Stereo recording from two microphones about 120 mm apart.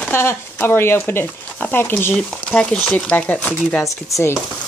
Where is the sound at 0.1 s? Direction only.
20° left (ahead or behind).